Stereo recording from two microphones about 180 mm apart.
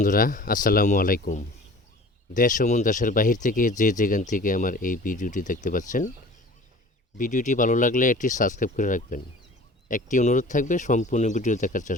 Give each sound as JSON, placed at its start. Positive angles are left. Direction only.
{"t": 0.0, "sound": "speech", "side_deg": 50}
{"t": 7.2, "sound": "speech", "side_deg": 45}